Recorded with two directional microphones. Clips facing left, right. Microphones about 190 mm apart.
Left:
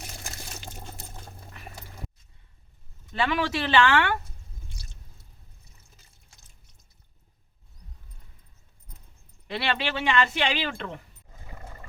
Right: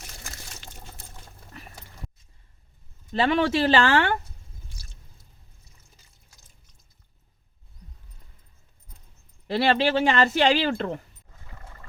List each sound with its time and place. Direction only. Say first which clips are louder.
3.1 s speech: right 5 dB; 30° right (ahead or behind)
9.5 s speech: right 8 dB; 40° right (ahead or behind)